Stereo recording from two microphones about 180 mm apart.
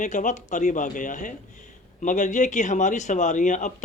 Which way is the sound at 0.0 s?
45° left (ahead or behind).